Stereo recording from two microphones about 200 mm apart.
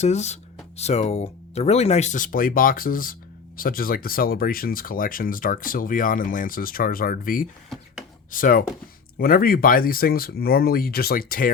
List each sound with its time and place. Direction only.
0.0 s speech: 35° left (ahead or behind)